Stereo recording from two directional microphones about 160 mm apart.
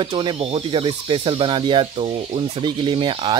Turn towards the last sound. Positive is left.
turn(degrees=-30)  # may be behind; listen again after turning